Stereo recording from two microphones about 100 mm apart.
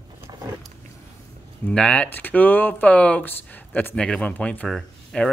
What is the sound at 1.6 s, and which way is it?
Speech, 10° left (ahead or behind).